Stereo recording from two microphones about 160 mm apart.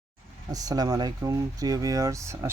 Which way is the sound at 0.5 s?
25° right (ahead or behind).